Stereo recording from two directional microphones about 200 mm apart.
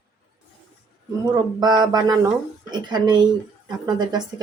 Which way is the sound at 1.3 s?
20° right (ahead or behind).